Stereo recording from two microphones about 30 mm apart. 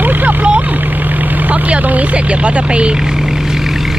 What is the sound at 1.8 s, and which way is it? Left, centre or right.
Speech, right.